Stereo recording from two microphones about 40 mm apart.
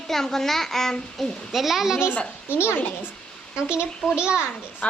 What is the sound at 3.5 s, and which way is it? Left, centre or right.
Speech, right.